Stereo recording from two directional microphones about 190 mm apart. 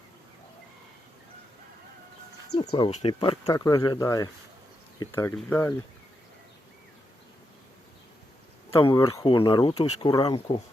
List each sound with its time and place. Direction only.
2.6 s speech: 25° left (ahead or behind)
3.2 s speech: 20° left (ahead or behind)
8.7 s speech: 25° left (ahead or behind)